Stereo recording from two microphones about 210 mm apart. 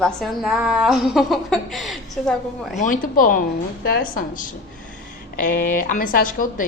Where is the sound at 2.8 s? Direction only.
40° left (ahead or behind).